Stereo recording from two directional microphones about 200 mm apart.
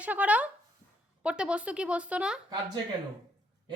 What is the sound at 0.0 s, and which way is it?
A woman's voice, 5° right (ahead or behind).